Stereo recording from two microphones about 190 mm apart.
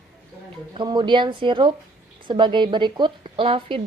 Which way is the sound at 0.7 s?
25° right (ahead or behind).